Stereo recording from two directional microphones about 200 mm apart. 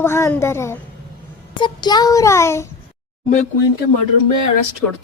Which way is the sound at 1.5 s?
20° left (ahead or behind).